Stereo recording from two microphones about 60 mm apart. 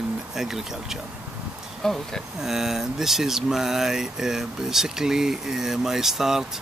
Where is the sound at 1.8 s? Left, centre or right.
Centre.